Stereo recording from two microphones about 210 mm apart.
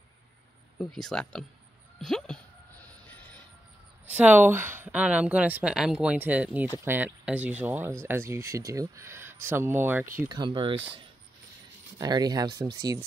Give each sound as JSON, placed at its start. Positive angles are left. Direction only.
{"t": 0.7, "sound": "speech", "side_deg": 0}
{"t": 2.0, "sound": "a sound", "side_deg": 0}
{"t": 4.0, "sound": "speech", "side_deg": -5}
{"t": 10.2, "sound": "speech", "side_deg": -20}
{"t": 12.0, "sound": "speech", "side_deg": -20}